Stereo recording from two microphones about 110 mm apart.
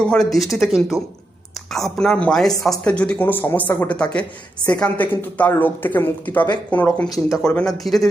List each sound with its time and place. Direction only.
0.1 s speech: centre (ahead or behind)
7.3 s speech: 5° right (ahead or behind)